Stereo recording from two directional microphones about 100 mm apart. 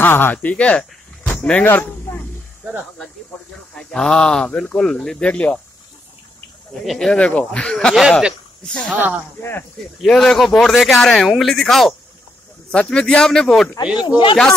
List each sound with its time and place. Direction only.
0.0 s speech: 20° left (ahead or behind)
3.7 s speech: 5° left (ahead or behind)
6.8 s speech: centre (ahead or behind)
8.9 s speech: 15° right (ahead or behind)
9.4 s speech: 25° left (ahead or behind)
10.0 s speech: 5° left (ahead or behind)
14.0 s speech: 50° left (ahead or behind)